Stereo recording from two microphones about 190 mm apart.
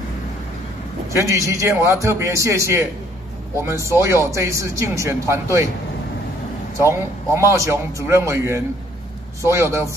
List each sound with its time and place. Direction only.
1.1 s speech: 15° right (ahead or behind)
6.9 s speech: 15° right (ahead or behind)